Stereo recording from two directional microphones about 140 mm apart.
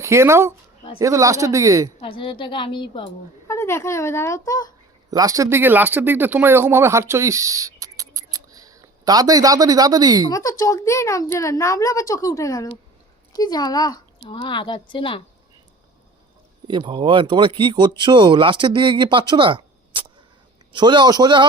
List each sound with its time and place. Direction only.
0.0 s speech: 20° right (ahead or behind)
2.0 s speech: 40° left (ahead or behind)
3.4 s a woman's voice: 20° left (ahead or behind)
5.1 s speech: 25° right (ahead or behind)
10.3 s speech: 25° left (ahead or behind)
16.6 s speech: 35° right (ahead or behind)